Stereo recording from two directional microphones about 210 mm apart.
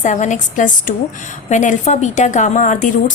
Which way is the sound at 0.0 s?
35° left (ahead or behind).